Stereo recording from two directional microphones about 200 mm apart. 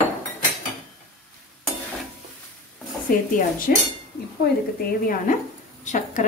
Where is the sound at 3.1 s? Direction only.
45° left (ahead or behind).